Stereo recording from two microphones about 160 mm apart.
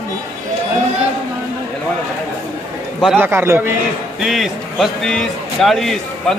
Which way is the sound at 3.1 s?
15° right (ahead or behind).